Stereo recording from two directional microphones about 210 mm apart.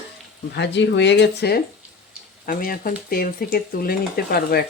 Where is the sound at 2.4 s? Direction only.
45° left (ahead or behind).